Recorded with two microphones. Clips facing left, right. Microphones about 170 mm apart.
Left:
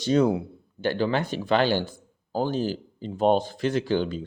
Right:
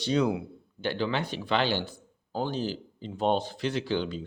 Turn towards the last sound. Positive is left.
turn(degrees=45)  # may be behind; listen again after turning